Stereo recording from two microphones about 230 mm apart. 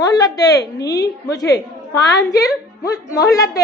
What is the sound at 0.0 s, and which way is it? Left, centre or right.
A woman's voice, centre.